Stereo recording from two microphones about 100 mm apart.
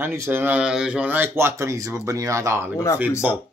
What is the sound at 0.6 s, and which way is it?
Speech, 10° right (ahead or behind).